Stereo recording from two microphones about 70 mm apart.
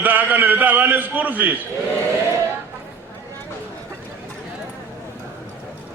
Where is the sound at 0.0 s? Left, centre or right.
Right.